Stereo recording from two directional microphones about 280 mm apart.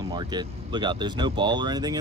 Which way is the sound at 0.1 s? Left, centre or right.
Centre.